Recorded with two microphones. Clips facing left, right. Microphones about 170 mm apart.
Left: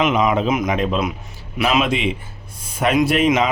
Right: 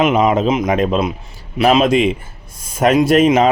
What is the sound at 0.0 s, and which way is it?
Speech, 30° right (ahead or behind).